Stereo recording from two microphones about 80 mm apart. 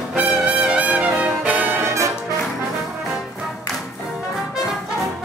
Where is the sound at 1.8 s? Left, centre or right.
Right.